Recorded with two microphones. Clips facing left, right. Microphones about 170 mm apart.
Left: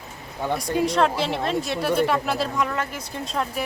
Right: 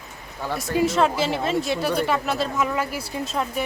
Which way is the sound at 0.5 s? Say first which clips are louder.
Right 1 dB; centre (ahead or behind).